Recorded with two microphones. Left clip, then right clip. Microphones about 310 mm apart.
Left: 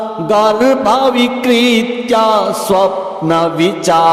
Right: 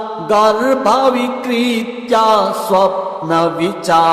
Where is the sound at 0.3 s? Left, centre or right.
Left.